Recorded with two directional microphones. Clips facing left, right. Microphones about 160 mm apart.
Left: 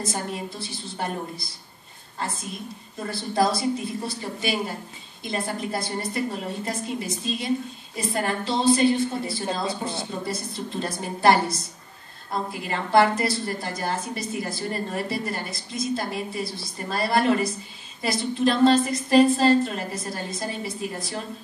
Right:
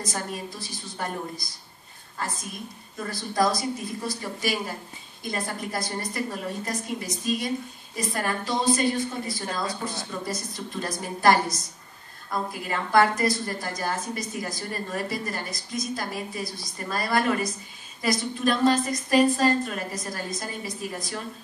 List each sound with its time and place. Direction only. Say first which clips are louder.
0.0 s a woman's voice: left 2 dB; 25° left (ahead or behind)
3.0 s a woman's voice: left 2 dB; 25° left (ahead or behind)
8.1 s a woman's voice: left 2 dB; 25° left (ahead or behind)